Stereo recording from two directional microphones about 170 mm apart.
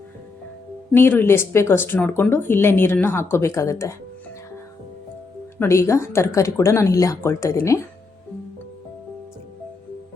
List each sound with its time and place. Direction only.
0.9 s speech: 10° left (ahead or behind)
5.5 s speech: 15° left (ahead or behind)